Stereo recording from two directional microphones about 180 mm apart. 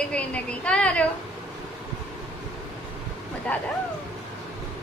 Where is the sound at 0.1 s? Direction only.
5° left (ahead or behind).